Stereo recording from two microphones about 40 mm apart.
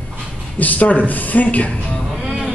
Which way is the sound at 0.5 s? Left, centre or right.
Left.